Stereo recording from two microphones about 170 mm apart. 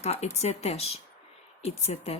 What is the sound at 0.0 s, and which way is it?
Speech, 40° left (ahead or behind).